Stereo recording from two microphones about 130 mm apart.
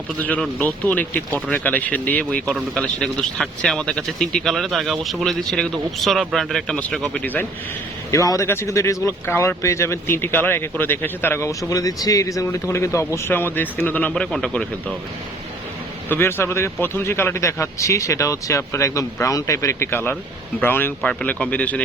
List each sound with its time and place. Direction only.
0.2 s speech: 10° left (ahead or behind)
8.1 s speech: 25° left (ahead or behind); by 14.9 s 5° left (ahead or behind)
16.0 s speech: 20° left (ahead or behind)
21.1 s speech: 5° left (ahead or behind)